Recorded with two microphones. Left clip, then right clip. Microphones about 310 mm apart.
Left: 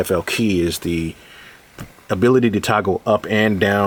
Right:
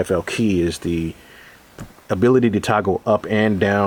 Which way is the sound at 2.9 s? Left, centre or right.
Right.